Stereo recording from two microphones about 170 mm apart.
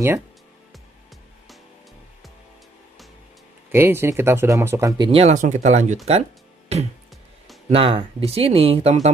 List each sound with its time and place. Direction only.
3.7 s speech: 15° right (ahead or behind); by 9.1 s 40° right (ahead or behind)